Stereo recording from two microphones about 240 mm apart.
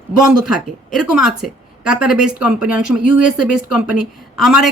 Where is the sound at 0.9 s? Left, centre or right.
Centre.